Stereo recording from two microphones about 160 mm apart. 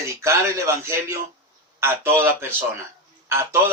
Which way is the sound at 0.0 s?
15° right (ahead or behind).